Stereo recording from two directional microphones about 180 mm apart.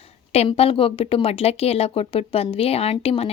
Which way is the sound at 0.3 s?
35° left (ahead or behind).